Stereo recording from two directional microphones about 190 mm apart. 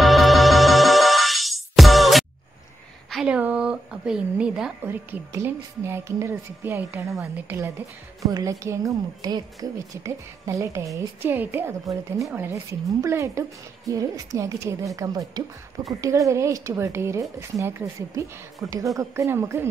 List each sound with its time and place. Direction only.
0.0 s music: centre (ahead or behind)
3.1 s a woman's voice: 5° right (ahead or behind)